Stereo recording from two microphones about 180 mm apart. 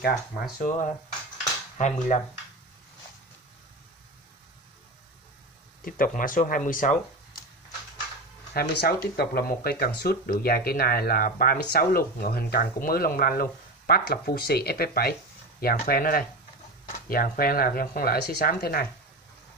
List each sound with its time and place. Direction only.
0.0 s speech: 55° left (ahead or behind)
5.9 s speech: 50° left (ahead or behind)
8.5 s speech: 60° left (ahead or behind)